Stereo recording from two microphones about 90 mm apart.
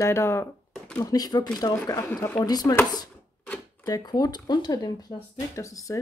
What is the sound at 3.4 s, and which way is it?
Typewriter, 20° left (ahead or behind).